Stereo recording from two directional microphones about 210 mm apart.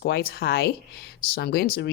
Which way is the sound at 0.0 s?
50° left (ahead or behind).